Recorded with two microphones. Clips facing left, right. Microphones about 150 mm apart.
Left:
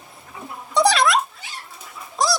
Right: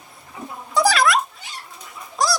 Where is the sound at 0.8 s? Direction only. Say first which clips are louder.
Even; centre (ahead or behind).